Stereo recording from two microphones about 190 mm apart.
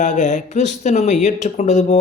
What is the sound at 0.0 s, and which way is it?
Speech, 40° left (ahead or behind).